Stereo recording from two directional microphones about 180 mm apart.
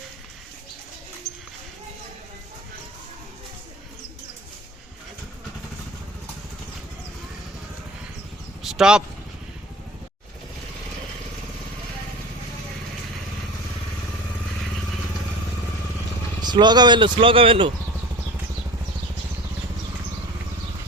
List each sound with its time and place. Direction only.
8.6 s vehicle: 5° right (ahead or behind)
16.4 s speech: 25° right (ahead or behind)